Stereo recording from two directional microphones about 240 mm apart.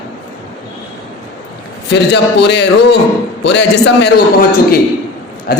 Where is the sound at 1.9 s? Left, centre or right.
Left.